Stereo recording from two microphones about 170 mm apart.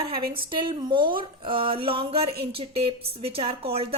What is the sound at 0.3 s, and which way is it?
Speech, 30° right (ahead or behind).